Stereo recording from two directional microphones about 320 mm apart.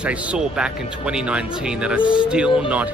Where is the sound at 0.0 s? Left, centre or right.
Centre.